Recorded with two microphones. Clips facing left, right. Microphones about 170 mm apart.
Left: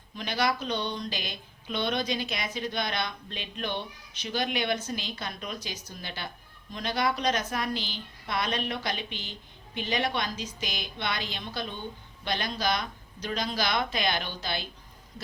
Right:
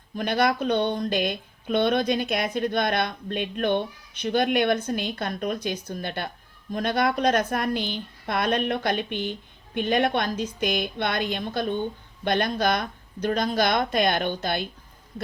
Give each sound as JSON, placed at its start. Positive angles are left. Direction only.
{"t": 0.2, "sound": "a woman's voice", "side_deg": -55}